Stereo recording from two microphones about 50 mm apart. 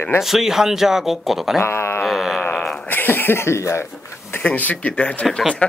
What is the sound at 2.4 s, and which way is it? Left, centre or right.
Speech, left.